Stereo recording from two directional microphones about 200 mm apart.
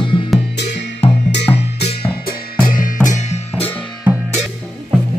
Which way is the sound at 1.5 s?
30° left (ahead or behind).